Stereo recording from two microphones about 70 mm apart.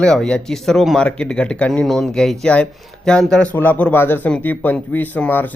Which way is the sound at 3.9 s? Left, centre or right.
Left.